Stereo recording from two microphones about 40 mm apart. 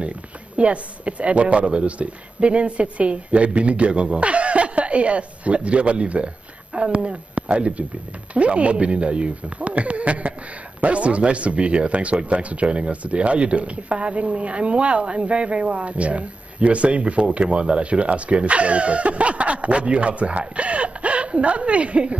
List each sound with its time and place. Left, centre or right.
0.6 s speech: right